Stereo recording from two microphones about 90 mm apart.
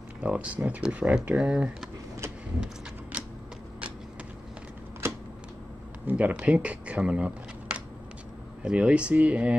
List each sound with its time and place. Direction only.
0.2 s speech: 10° right (ahead or behind)
2.6 s a sound: 10° right (ahead or behind)
5.0 s typewriter: 30° right (ahead or behind)
6.0 s speech: 15° right (ahead or behind)